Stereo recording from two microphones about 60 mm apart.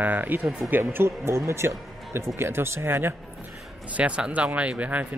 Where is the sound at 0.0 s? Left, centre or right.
Right.